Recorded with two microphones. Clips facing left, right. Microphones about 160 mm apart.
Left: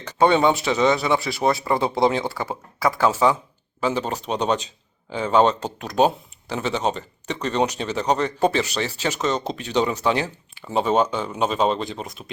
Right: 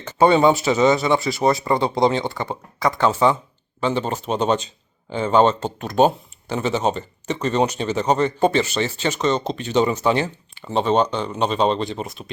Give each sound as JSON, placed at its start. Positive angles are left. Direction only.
{"t": 0.0, "sound": "speech", "side_deg": 0}